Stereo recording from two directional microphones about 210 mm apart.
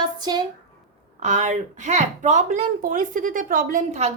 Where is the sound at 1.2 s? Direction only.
35° right (ahead or behind).